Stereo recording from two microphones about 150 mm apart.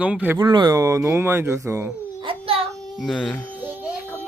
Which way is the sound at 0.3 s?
30° right (ahead or behind).